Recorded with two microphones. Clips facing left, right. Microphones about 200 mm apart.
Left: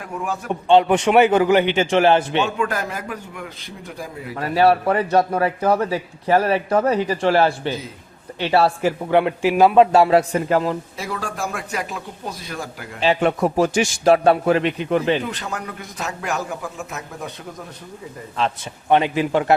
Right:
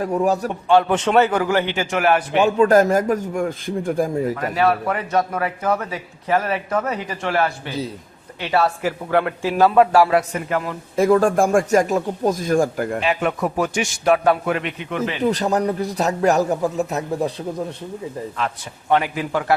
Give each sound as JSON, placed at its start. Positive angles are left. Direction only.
{"t": 0.0, "sound": "a man's voice", "side_deg": -35}
{"t": 0.7, "sound": "a man's voice", "side_deg": 15}
{"t": 2.6, "sound": "a man's voice", "side_deg": -40}
{"t": 4.4, "sound": "a man's voice", "side_deg": 30}
{"t": 10.9, "sound": "a man's voice", "side_deg": -50}
{"t": 13.0, "sound": "a man's voice", "side_deg": 30}
{"t": 15.2, "sound": "a man's voice", "side_deg": -40}
{"t": 18.3, "sound": "a man's voice", "side_deg": 25}